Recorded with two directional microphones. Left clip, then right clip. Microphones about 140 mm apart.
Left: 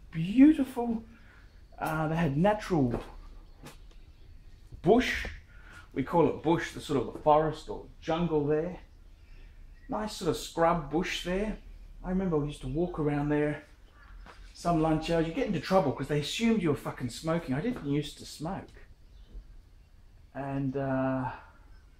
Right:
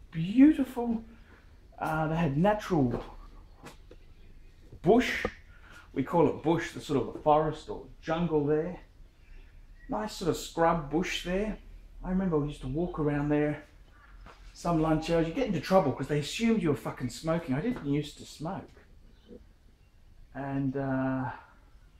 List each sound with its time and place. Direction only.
0.1 s speech: centre (ahead or behind)
5.9 s speech: 15° right (ahead or behind)
9.9 s speech: 15° right (ahead or behind)
12.0 s speech: 5° right (ahead or behind)
14.6 s speech: 20° right (ahead or behind); by 18.7 s centre (ahead or behind)
20.3 s speech: centre (ahead or behind)